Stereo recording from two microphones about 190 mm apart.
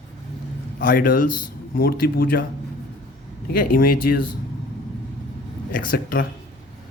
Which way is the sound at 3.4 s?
50° left (ahead or behind).